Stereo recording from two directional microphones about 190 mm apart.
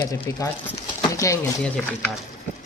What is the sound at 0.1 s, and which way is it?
Speech, 15° left (ahead or behind).